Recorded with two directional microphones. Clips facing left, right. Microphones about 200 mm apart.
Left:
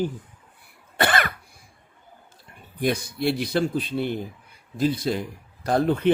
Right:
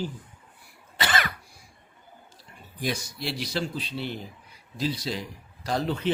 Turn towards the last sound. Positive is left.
turn(degrees=55)  # may be behind; listen again after turning